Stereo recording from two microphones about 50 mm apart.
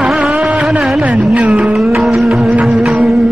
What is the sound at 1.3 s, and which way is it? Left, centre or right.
Music, right.